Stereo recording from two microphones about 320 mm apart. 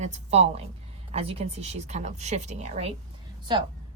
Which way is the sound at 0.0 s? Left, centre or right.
Right.